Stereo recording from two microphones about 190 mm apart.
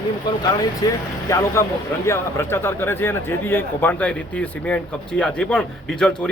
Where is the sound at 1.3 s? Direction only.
15° left (ahead or behind).